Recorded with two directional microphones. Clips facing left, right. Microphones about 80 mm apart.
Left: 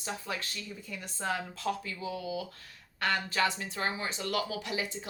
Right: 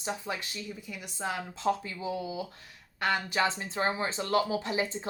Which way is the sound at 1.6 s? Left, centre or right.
Right.